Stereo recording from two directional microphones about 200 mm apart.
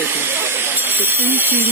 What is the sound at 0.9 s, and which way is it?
Speech, 10° right (ahead or behind).